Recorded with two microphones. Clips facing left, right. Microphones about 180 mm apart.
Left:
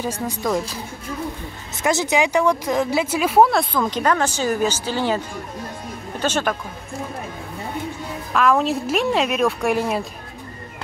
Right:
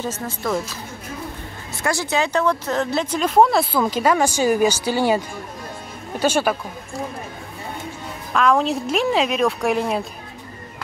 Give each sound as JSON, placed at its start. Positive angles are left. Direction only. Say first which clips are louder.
{"t": 0.0, "sound": "speech", "louder": "left 2 dB", "side_deg": 15}
{"t": 1.8, "sound": "speech", "louder": "left 3 dB", "side_deg": 20}
{"t": 8.3, "sound": "speech", "louder": "even", "side_deg": 0}